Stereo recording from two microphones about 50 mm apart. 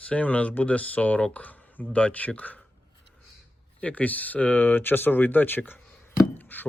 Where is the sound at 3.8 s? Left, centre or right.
Left.